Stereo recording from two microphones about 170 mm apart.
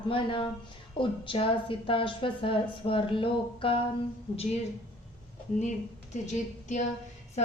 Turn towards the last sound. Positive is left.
turn(degrees=45)  # may be behind; listen again after turning